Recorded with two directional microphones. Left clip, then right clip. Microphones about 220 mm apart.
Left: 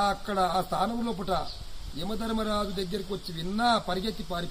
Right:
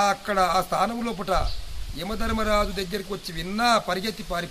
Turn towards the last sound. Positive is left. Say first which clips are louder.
# right 4 dB
turn(degrees=-5)  # may be behind; listen again after turning